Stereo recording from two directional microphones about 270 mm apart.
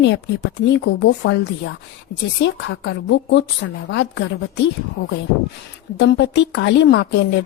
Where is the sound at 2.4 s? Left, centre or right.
Left.